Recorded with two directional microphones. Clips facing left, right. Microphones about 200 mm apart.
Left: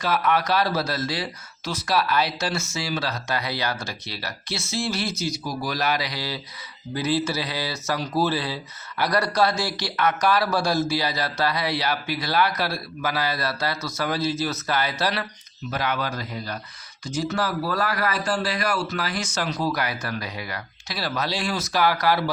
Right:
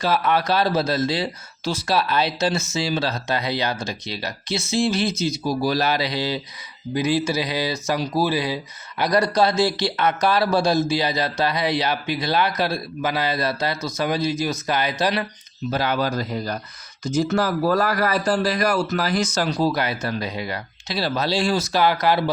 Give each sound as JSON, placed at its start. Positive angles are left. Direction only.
{"t": 0.0, "sound": "speech", "side_deg": -30}
{"t": 15.7, "sound": "a man's voice", "side_deg": -30}